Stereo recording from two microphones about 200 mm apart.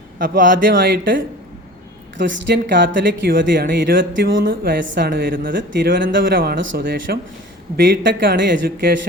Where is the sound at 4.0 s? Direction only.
70° right (ahead or behind).